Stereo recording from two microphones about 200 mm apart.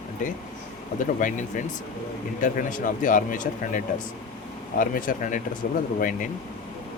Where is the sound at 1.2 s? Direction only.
40° left (ahead or behind).